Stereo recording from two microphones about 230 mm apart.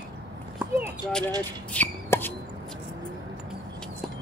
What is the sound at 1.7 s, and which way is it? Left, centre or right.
Shuffle, centre.